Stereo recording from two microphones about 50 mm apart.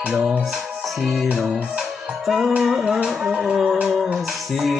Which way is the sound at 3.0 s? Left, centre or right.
Centre.